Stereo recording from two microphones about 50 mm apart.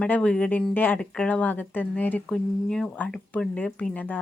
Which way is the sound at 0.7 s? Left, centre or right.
Left.